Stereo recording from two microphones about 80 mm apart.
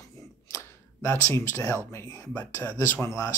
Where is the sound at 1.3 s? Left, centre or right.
Left.